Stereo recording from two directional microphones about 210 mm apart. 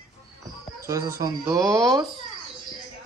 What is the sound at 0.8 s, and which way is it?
Speech, 15° right (ahead or behind).